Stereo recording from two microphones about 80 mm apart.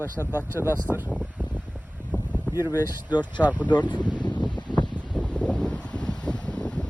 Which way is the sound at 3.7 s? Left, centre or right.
Left.